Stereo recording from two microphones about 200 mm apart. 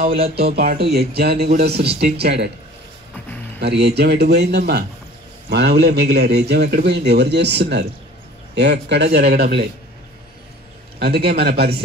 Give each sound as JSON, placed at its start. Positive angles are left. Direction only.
{"t": 0.0, "sound": "speech", "side_deg": -50}
{"t": 3.5, "sound": "a man's voice", "side_deg": -55}
{"t": 11.0, "sound": "speech", "side_deg": -50}